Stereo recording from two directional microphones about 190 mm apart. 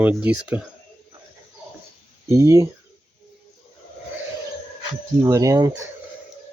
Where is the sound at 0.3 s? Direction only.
5° right (ahead or behind).